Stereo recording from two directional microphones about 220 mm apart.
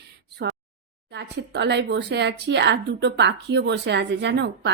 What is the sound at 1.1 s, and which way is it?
A woman's voice, 50° right (ahead or behind).